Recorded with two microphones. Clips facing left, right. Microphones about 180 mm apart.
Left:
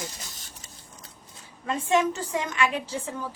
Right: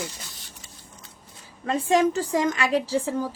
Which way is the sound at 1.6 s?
35° right (ahead or behind).